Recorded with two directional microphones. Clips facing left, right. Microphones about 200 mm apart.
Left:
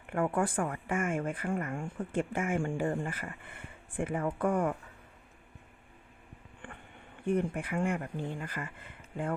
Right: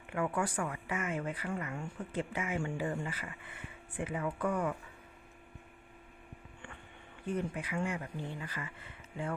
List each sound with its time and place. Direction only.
0.1 s speech: 50° left (ahead or behind)
7.3 s speech: 55° left (ahead or behind)